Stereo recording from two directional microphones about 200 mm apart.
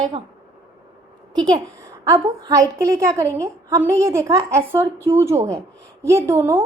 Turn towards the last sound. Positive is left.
turn(degrees=-10)  # may be behind; listen again after turning